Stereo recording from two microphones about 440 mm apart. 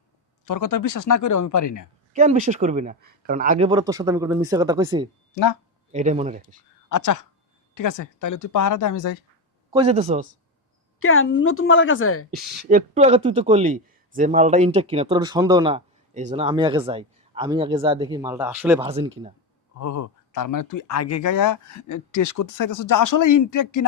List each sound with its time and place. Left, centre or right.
0.4 s speech: left
2.1 s speech: centre
5.3 s speech: left
5.9 s speech: centre
6.9 s speech: left
9.7 s speech: centre
11.0 s a woman's voice: left
12.3 s speech: centre
19.8 s speech: left